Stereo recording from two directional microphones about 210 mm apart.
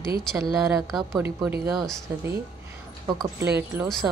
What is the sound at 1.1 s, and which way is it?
Speech, 10° right (ahead or behind).